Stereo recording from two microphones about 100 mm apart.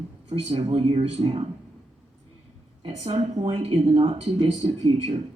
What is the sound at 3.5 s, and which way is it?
Speech, 75° right (ahead or behind).